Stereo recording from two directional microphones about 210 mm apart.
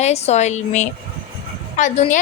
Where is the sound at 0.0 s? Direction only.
30° left (ahead or behind).